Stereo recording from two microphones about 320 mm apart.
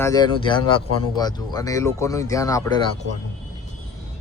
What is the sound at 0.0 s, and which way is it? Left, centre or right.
Speech, centre.